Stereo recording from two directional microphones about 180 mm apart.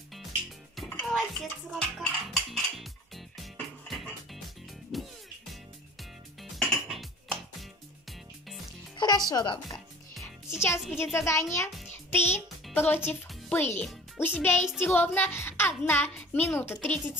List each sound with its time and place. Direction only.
0.7 s cutlery: 5° left (ahead or behind)
3.5 s music: centre (ahead or behind)
6.5 s music: centre (ahead or behind)
8.9 s music: 20° left (ahead or behind)
10.6 s a woman's voice: 15° left (ahead or behind)
13.3 s music: 10° left (ahead or behind)
13.7 s a child's voice: 10° left (ahead or behind)